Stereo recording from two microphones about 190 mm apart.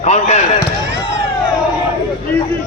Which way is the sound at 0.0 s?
35° left (ahead or behind).